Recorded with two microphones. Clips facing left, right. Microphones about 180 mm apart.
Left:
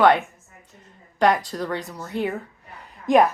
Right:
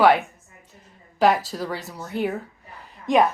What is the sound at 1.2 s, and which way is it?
A woman's voice, 5° right (ahead or behind).